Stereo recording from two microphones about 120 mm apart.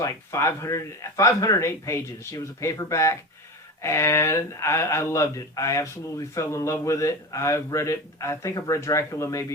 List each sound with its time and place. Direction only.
0.0 s speech: 25° left (ahead or behind)